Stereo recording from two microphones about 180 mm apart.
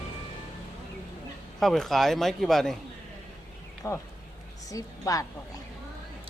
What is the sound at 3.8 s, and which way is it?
Speech, 15° left (ahead or behind).